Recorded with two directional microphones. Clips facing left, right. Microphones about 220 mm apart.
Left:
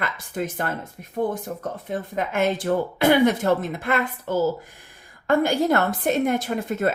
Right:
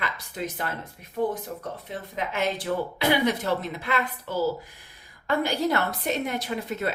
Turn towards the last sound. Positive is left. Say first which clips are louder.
# left 5 dB
turn(degrees=50)  # may be behind; listen again after turning